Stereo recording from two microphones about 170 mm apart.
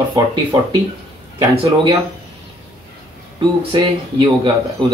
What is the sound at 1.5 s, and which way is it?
Speech, 35° right (ahead or behind).